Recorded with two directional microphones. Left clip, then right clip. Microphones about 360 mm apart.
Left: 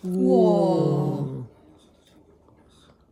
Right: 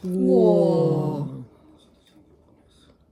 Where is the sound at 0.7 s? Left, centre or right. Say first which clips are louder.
Right 2 dB; centre.